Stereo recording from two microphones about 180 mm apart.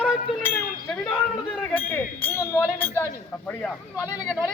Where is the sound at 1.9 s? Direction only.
10° left (ahead or behind).